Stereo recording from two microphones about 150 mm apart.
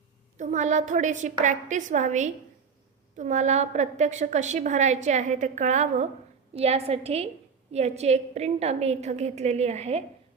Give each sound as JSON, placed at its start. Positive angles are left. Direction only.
{"t": 0.3, "sound": "a woman's voice", "side_deg": -55}